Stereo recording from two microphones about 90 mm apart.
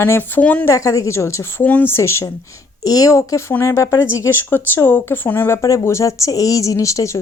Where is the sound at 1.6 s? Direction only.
20° left (ahead or behind).